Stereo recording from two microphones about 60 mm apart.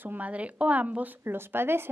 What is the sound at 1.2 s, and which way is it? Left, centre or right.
Speech, right.